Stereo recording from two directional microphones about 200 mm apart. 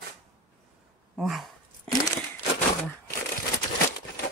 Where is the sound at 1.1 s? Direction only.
Centre (ahead or behind).